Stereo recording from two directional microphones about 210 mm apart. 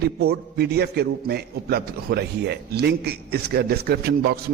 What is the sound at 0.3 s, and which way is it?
A man's voice, 50° right (ahead or behind).